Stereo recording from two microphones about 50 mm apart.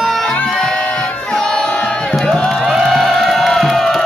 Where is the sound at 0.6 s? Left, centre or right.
Centre.